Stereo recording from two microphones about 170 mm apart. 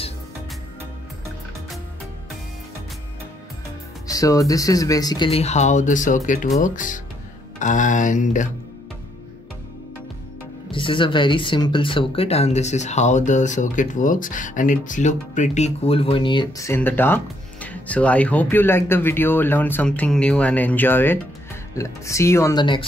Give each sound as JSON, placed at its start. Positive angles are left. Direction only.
{"t": 4.1, "sound": "speech", "side_deg": 20}
{"t": 10.7, "sound": "speech", "side_deg": 30}
{"t": 16.6, "sound": "speech", "side_deg": 15}